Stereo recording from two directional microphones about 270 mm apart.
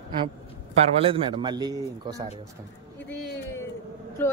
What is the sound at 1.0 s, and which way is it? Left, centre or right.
A man's voice, centre.